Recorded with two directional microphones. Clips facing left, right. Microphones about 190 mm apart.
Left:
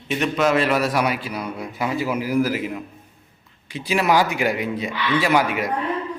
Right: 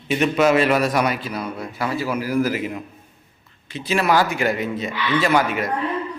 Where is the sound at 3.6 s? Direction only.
15° left (ahead or behind).